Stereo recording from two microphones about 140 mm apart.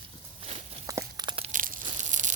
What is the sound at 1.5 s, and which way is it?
Tearing, 75° right (ahead or behind).